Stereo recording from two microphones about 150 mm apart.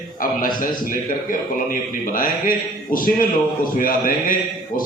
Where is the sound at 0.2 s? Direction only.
65° left (ahead or behind).